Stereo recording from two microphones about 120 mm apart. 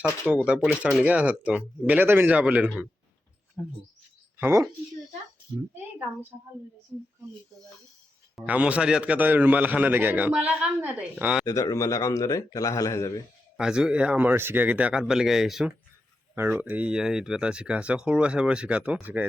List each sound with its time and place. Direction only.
0.3 s speech: 10° right (ahead or behind)
4.4 s speech: 20° right (ahead or behind)
8.4 s speech: 10° right (ahead or behind)
11.4 s a man's voice: 30° left (ahead or behind)
13.6 s speech: 5° right (ahead or behind)
16.3 s speech: 20° right (ahead or behind)